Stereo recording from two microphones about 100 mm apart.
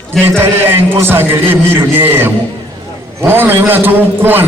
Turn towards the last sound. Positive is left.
turn(degrees=-20)  # may be behind; listen again after turning